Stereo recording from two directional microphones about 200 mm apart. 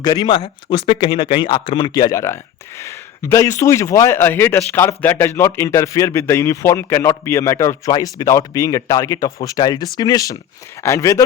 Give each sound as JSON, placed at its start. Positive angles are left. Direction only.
{"t": 0.0, "sound": "speech", "side_deg": 25}